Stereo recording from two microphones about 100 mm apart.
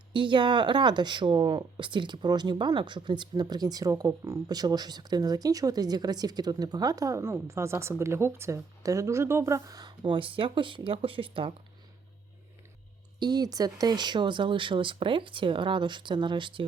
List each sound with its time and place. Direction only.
0.1 s speech: 55° right (ahead or behind)
13.1 s speech: 45° right (ahead or behind)